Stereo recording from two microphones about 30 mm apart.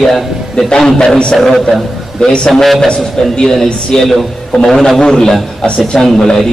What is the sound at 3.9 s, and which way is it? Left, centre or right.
A man's voice, centre.